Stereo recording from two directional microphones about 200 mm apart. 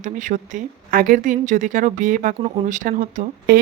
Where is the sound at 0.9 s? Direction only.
45° right (ahead or behind).